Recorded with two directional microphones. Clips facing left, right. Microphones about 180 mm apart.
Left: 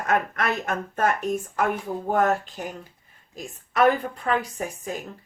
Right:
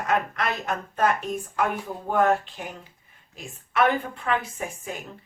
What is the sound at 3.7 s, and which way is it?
Speech, 40° left (ahead or behind).